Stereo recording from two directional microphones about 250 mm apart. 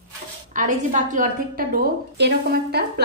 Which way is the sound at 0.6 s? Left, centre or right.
Right.